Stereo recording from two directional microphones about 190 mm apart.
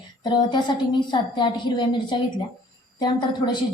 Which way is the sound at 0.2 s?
20° left (ahead or behind).